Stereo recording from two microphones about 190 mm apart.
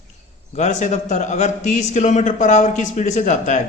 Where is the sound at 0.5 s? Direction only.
40° left (ahead or behind).